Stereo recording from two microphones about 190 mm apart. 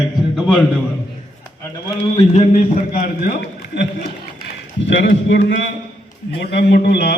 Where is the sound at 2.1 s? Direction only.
35° left (ahead or behind).